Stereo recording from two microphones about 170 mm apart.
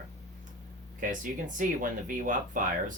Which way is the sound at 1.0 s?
50° right (ahead or behind).